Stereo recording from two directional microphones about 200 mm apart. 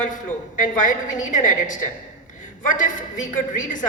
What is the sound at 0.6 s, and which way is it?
A woman's voice, 40° left (ahead or behind).